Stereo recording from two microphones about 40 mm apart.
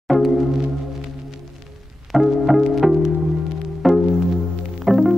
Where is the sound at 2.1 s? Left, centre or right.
Centre.